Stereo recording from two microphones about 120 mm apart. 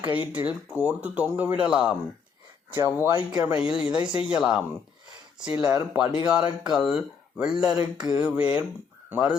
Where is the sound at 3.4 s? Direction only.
10° right (ahead or behind).